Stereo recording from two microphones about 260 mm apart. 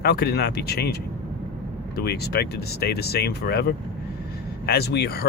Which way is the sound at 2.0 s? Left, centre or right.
Left.